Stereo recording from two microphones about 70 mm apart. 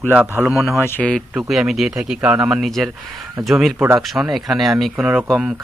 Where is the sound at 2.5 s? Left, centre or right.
Centre.